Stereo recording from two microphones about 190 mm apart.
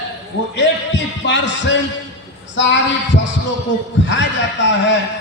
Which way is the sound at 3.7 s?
70° left (ahead or behind).